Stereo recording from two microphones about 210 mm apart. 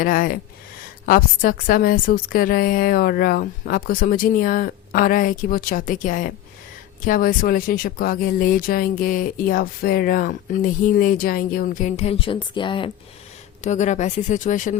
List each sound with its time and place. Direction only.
0.0 s a woman's voice: 40° left (ahead or behind); by 12.9 s 25° left (ahead or behind)
13.7 s speech: 35° left (ahead or behind)